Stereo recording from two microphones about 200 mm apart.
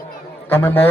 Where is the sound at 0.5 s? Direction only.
10° left (ahead or behind).